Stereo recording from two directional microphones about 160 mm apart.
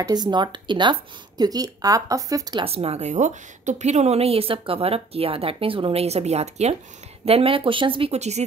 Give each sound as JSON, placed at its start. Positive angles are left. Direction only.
{"t": 0.0, "sound": "speech", "side_deg": -25}
{"t": 2.6, "sound": "a woman's voice", "side_deg": -40}